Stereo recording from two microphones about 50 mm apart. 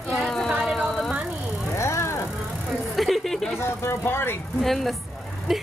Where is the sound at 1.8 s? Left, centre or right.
Left.